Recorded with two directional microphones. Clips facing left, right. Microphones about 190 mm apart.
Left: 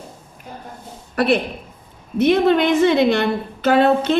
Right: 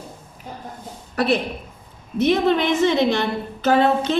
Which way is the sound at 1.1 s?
60° left (ahead or behind).